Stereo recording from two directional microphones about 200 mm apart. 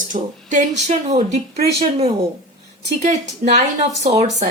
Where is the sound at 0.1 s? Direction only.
40° right (ahead or behind).